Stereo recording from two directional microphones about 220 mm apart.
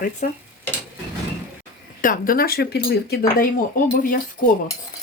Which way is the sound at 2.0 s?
40° left (ahead or behind).